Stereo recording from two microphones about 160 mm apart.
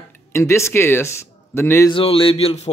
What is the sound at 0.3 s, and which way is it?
A man's voice, 15° left (ahead or behind).